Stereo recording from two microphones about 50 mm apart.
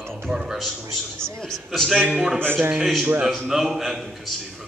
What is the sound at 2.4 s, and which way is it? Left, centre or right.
Speech, right.